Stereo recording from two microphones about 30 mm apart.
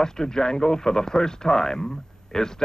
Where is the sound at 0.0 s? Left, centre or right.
Left.